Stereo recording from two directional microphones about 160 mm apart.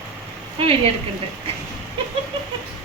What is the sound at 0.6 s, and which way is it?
Speech, 35° right (ahead or behind).